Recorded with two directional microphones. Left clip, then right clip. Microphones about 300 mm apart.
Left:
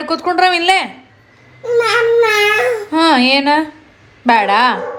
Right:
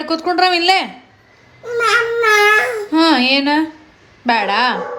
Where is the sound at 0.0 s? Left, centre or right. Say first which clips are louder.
Left 2 dB; centre.